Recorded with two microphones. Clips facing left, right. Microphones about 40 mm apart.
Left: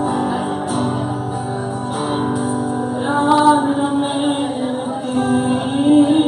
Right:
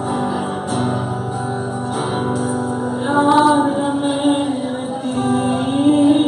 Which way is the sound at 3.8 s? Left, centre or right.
Left.